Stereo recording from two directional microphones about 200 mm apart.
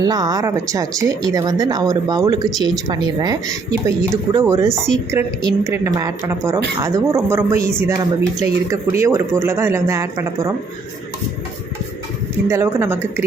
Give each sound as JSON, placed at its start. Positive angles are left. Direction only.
{"t": 0.0, "sound": "speech", "side_deg": -20}
{"t": 12.5, "sound": "speech", "side_deg": -15}